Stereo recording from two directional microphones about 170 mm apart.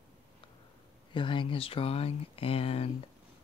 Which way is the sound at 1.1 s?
30° left (ahead or behind).